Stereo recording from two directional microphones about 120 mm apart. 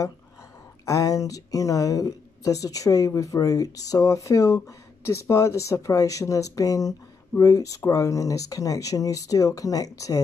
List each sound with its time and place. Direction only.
0.8 s speech: 25° left (ahead or behind)